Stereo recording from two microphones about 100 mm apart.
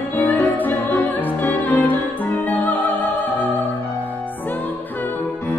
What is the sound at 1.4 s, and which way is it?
Opera, 15° left (ahead or behind).